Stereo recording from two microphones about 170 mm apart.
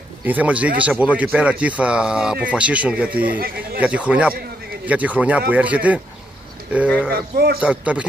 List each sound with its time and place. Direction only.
0.2 s speech: 10° right (ahead or behind)
3.3 s speech: 60° right (ahead or behind)
3.8 s speech: 5° right (ahead or behind)
7.1 s speech: 65° right (ahead or behind)
7.6 s speech: 10° right (ahead or behind)